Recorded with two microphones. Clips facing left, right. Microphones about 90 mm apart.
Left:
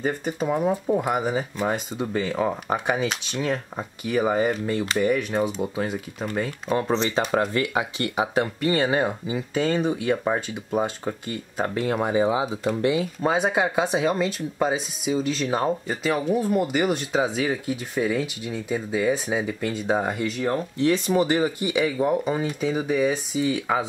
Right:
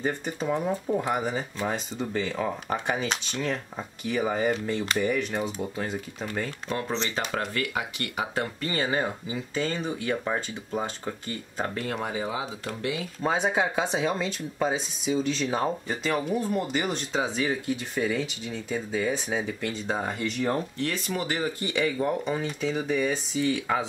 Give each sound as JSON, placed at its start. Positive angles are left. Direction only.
{"t": 0.0, "sound": "speech", "side_deg": 10}
{"t": 6.9, "sound": "speech", "side_deg": 40}
{"t": 7.2, "sound": "speech", "side_deg": 25}
{"t": 13.2, "sound": "speech", "side_deg": 10}
{"t": 20.7, "sound": "speech", "side_deg": 20}